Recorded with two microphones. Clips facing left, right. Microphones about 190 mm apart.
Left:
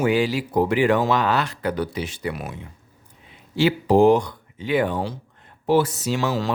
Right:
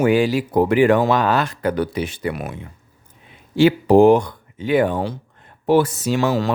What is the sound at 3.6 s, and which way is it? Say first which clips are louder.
Speech: right 4 dB; 55° right (ahead or behind).